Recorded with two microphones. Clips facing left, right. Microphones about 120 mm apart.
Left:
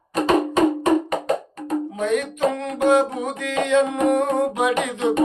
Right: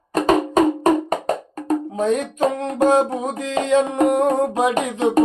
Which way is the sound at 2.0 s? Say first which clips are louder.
Right 2 dB; 30° right (ahead or behind).